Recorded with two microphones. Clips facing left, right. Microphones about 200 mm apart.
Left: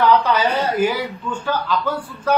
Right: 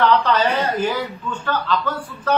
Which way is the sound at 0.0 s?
10° left (ahead or behind).